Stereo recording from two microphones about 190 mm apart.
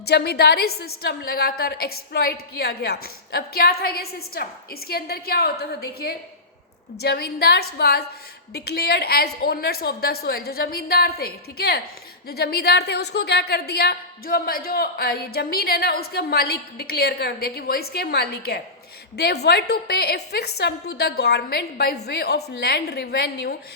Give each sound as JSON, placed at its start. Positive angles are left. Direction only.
{"t": 0.0, "sound": "a woman's voice", "side_deg": 55}